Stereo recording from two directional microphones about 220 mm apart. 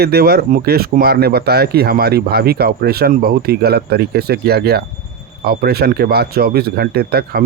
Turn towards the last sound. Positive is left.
turn(degrees=-45)  # may be behind; listen again after turning